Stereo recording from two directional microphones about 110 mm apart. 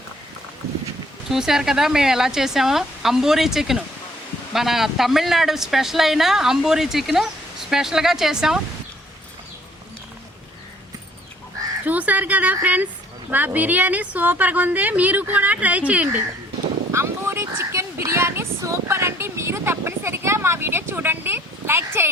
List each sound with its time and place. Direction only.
1.3 s speech: 5° right (ahead or behind)
11.9 s a woman's voice: 15° right (ahead or behind)
16.9 s a sound: 25° right (ahead or behind)